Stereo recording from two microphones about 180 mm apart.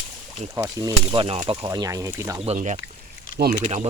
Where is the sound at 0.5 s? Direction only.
20° right (ahead or behind).